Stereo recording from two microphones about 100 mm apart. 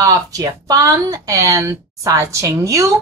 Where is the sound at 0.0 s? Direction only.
35° right (ahead or behind).